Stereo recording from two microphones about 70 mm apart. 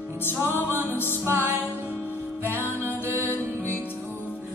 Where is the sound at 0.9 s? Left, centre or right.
Left.